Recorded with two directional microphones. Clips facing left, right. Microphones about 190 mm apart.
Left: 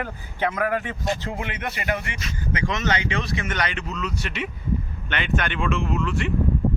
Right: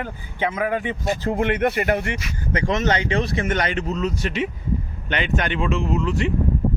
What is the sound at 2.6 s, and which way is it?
Speech, 45° right (ahead or behind).